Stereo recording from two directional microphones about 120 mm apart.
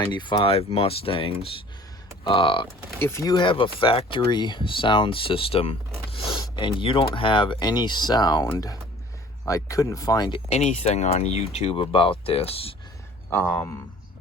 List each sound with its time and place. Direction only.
0.1 s speech: 40° left (ahead or behind)
3.0 s speech: 25° left (ahead or behind)
3.3 s speech: 45° left (ahead or behind)
6.4 s speech: 40° left (ahead or behind)
10.5 s speech: 70° left (ahead or behind); by 12.7 s 55° left (ahead or behind)
13.3 s speech: 15° left (ahead or behind)